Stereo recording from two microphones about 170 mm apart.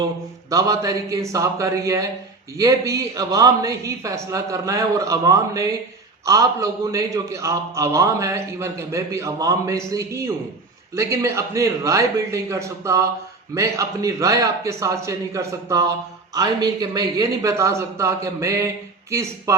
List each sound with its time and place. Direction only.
0.5 s a man's voice: 20° right (ahead or behind)